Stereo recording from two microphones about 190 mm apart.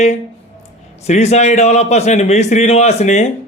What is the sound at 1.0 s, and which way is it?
A man's voice, 35° left (ahead or behind).